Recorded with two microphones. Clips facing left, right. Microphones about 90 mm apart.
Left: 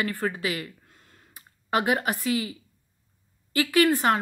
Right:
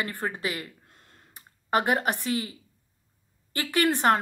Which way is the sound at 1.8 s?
40° right (ahead or behind).